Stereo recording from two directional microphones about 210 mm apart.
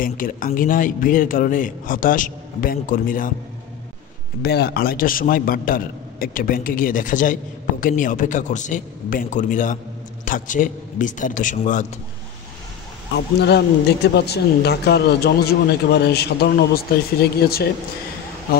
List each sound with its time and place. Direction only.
0.0 s a man's voice: 40° left (ahead or behind)
4.4 s a man's voice: 50° left (ahead or behind)
13.1 s a man's voice: 50° left (ahead or behind)